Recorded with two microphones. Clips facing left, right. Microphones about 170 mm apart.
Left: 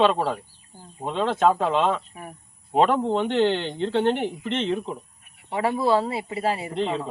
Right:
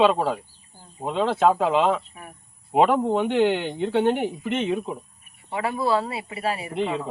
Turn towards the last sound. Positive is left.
turn(degrees=-5)  # may be behind; listen again after turning